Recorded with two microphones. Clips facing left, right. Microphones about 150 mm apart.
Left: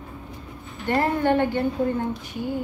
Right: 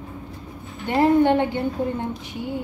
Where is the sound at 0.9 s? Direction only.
20° right (ahead or behind).